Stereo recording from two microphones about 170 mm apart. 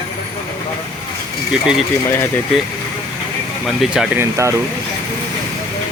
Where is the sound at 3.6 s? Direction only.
Centre (ahead or behind).